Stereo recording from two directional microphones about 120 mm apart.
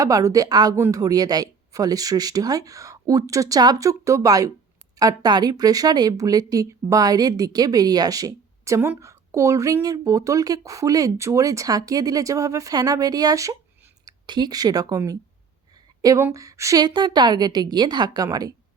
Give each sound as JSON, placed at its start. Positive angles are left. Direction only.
{"t": 0.0, "sound": "a woman's voice", "side_deg": -30}